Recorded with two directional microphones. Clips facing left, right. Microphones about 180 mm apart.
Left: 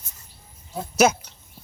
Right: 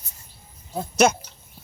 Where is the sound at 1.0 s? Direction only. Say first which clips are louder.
Even; 5° left (ahead or behind).